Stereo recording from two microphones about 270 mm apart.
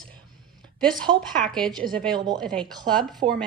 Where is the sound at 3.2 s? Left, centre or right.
Right.